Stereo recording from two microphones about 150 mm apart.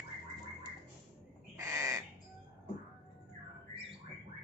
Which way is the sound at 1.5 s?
20° right (ahead or behind).